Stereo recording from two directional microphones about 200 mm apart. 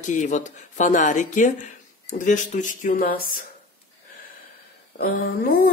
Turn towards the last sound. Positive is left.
turn(degrees=50)  # may be behind; listen again after turning